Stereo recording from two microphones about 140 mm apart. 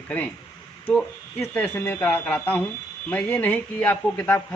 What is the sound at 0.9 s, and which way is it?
Speech, 15° left (ahead or behind).